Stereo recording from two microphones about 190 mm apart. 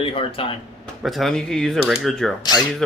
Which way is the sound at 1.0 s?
Centre (ahead or behind).